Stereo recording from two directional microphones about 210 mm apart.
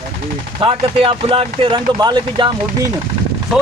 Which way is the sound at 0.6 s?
25° right (ahead or behind).